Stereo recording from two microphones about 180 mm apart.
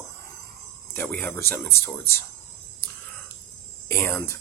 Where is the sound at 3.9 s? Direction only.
10° left (ahead or behind).